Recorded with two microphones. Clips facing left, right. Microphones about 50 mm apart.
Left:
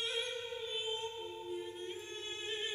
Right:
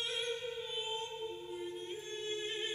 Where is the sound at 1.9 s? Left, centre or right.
Centre.